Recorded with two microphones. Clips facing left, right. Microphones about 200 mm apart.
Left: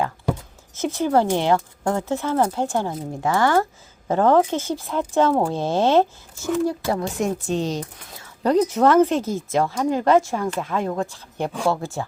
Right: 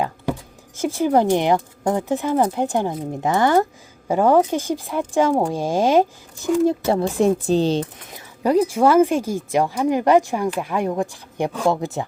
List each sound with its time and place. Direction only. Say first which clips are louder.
0.8 s speech: right 2 dB; 10° right (ahead or behind); by 7.9 s 30° right (ahead or behind)
8.1 s a sound: right 1 dB; 15° right (ahead or behind)
8.5 s speech: right 1 dB; 10° right (ahead or behind)